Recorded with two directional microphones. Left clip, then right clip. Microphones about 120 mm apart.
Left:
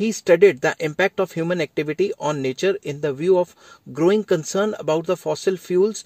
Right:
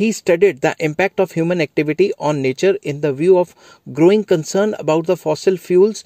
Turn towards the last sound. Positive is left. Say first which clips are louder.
# right 6 dB
turn(degrees=-40)  # may be behind; listen again after turning